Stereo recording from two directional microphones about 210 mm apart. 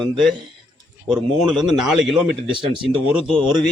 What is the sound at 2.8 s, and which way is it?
Speech, 5° right (ahead or behind).